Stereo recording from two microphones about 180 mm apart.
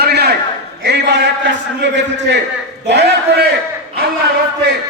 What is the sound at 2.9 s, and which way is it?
Speech, 70° right (ahead or behind).